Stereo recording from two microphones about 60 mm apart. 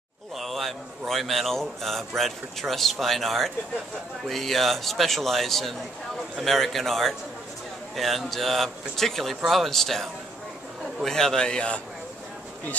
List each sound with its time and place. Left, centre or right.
0.4 s a man's voice: centre
11.1 s speech: centre